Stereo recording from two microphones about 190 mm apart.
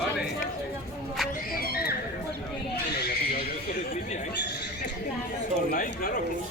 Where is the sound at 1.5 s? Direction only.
55° left (ahead or behind).